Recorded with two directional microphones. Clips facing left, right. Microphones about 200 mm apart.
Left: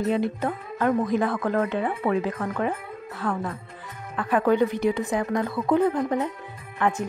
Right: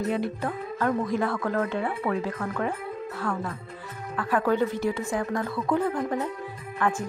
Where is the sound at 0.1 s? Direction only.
20° left (ahead or behind).